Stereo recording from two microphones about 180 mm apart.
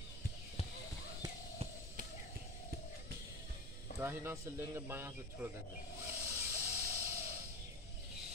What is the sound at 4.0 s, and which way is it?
Speech, 10° right (ahead or behind).